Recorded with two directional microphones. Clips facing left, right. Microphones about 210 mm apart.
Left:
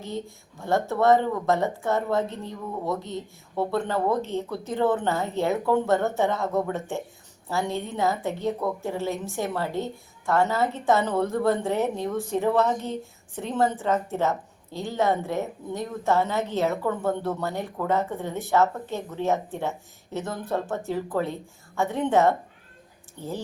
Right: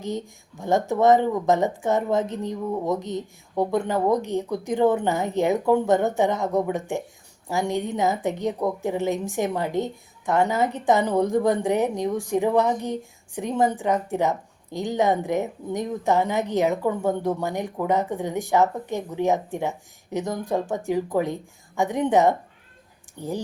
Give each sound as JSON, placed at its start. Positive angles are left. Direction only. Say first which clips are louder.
{"t": 0.0, "sound": "a woman's voice", "louder": "right 3 dB", "side_deg": -15}